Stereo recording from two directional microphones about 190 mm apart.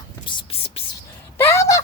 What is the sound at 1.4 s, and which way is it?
Speech, 15° left (ahead or behind).